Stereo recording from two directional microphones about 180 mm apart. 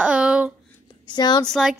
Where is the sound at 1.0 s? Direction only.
25° left (ahead or behind).